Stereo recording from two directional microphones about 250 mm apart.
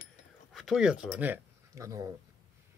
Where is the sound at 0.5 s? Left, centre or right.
Centre.